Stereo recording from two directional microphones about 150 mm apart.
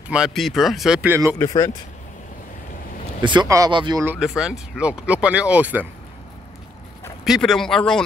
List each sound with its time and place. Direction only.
0.1 s speech: centre (ahead or behind)
1.4 s speech: 20° left (ahead or behind)
3.2 s speech: 30° right (ahead or behind)
4.0 s speech: 15° right (ahead or behind)
7.2 s speech: centre (ahead or behind)